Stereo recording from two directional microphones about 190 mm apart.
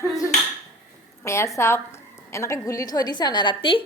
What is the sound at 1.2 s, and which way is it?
A woman's voice, 15° left (ahead or behind).